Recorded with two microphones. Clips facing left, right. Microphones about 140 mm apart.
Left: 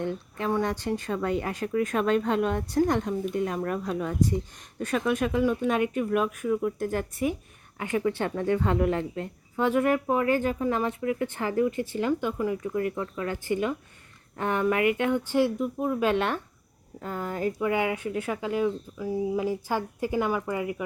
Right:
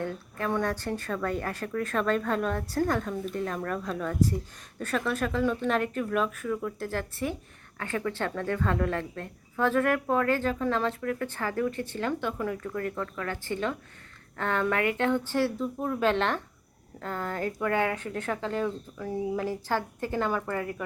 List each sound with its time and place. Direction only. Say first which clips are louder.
0.0 s speech: left 2 dB; 20° left (ahead or behind)